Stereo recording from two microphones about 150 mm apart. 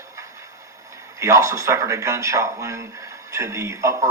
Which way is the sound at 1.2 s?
20° right (ahead or behind).